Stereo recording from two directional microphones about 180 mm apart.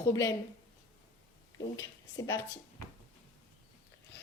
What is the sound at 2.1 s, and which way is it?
Speech, 20° left (ahead or behind).